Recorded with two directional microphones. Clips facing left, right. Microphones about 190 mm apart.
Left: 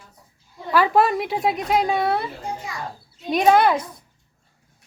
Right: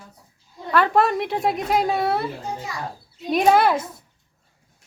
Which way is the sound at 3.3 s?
Centre (ahead or behind).